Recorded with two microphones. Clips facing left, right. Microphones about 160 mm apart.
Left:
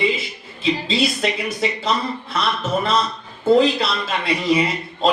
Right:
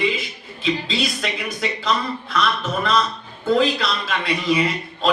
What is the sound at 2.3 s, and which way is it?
A man's voice, 30° left (ahead or behind).